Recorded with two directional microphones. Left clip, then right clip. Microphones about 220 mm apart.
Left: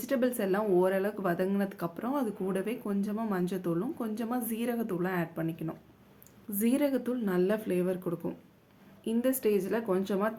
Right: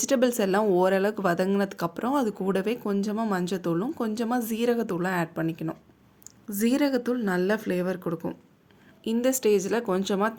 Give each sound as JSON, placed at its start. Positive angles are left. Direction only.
{"t": 0.0, "sound": "speech", "side_deg": -45}